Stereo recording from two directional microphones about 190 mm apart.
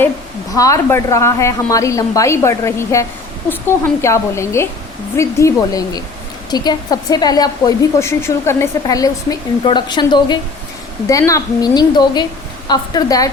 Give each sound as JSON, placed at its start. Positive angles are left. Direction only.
{"t": 0.5, "sound": "a woman's voice", "side_deg": 15}